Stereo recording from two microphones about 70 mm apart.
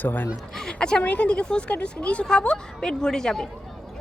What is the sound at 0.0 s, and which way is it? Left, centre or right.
Speech, left.